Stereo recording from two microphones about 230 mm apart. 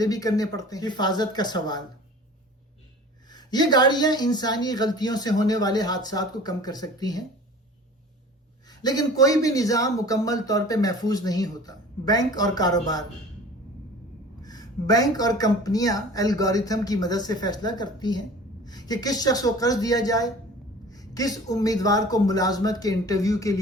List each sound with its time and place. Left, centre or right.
0.0 s speech: centre
3.2 s speech: centre
8.6 s speech: centre
14.4 s speech: centre